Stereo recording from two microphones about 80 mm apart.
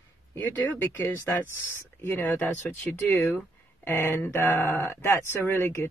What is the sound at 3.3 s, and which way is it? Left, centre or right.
Speech, left.